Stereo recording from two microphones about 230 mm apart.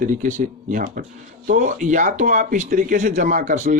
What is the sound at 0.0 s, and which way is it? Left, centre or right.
Speech, right.